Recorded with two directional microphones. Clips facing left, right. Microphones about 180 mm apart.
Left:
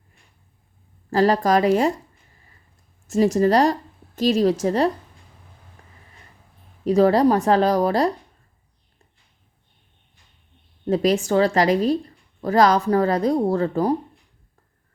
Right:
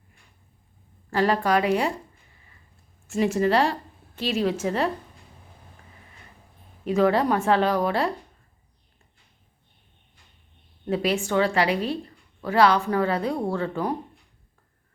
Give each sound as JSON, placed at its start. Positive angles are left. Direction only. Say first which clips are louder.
{"t": 1.1, "sound": "a woman's voice", "louder": "left 4 dB", "side_deg": 40}
{"t": 3.1, "sound": "a woman's voice", "louder": "left 4 dB", "side_deg": 40}
{"t": 6.8, "sound": "a woman's voice", "louder": "left 5 dB", "side_deg": 35}
{"t": 10.8, "sound": "a woman's voice", "louder": "left 5 dB", "side_deg": 40}